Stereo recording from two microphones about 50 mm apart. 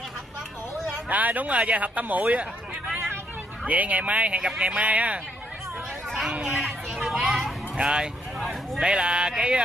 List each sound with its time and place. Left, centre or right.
1.0 s speech: right
6.3 s speech: right
7.0 s children playing: centre
7.7 s speech: centre